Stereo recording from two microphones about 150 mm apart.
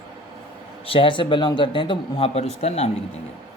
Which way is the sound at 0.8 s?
35° left (ahead or behind).